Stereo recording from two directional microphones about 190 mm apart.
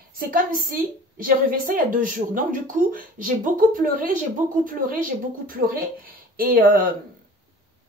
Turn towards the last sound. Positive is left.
turn(degrees=-50)  # may be behind; listen again after turning